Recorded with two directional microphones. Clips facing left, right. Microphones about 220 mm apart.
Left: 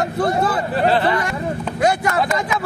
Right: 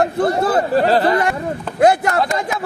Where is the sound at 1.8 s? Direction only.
55° right (ahead or behind).